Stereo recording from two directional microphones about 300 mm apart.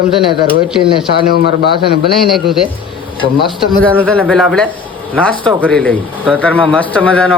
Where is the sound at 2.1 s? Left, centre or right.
Centre.